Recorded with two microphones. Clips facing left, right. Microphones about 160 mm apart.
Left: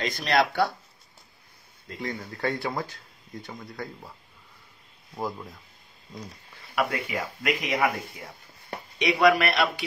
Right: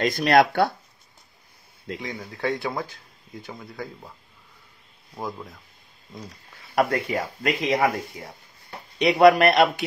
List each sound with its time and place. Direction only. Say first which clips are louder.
0.0 s speech: right 6 dB; 50° right (ahead or behind)
2.0 s speech: left 3 dB; centre (ahead or behind)
5.1 s speech: even; centre (ahead or behind)
6.7 s speech: right 5 dB; 35° right (ahead or behind)
8.9 s speech: right 5 dB; 35° right (ahead or behind)